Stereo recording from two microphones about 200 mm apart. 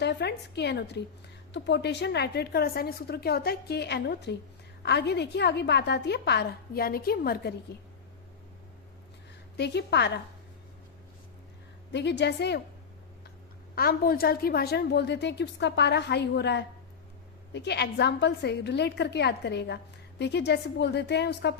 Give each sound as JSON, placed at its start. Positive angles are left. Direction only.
{"t": 0.0, "sound": "a woman's voice", "side_deg": 55}
{"t": 9.6, "sound": "a woman's voice", "side_deg": 55}
{"t": 11.9, "sound": "a woman's voice", "side_deg": 60}
{"t": 13.7, "sound": "a woman's voice", "side_deg": 50}